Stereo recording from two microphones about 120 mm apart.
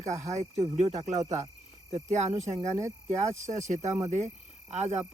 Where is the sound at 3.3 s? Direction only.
80° right.